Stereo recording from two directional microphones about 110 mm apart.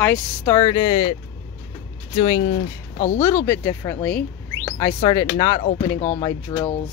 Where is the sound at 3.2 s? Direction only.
25° left (ahead or behind).